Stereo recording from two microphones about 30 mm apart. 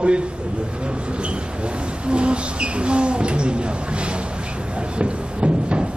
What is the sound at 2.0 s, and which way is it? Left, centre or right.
Speech, right.